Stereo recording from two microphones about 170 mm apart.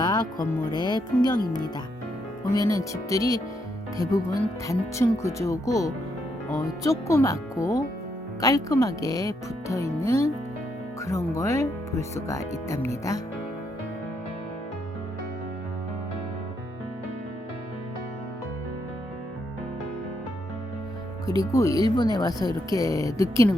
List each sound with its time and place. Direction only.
0.0 s speech: 25° left (ahead or behind)
2.4 s speech: 20° left (ahead or behind)
21.2 s speech: 20° left (ahead or behind)